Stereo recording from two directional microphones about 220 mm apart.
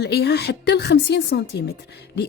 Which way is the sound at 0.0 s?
50° left (ahead or behind).